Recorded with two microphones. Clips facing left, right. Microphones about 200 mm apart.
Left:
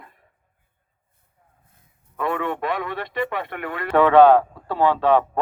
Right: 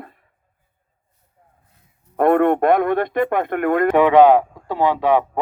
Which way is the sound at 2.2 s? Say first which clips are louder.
Right 10 dB; 55° right (ahead or behind).